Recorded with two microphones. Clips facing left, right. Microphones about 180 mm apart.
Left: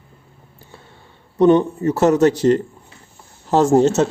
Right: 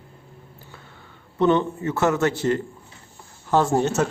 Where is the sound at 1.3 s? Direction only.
35° left (ahead or behind).